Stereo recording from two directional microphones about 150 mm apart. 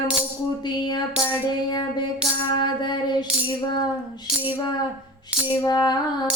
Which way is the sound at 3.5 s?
30° left (ahead or behind).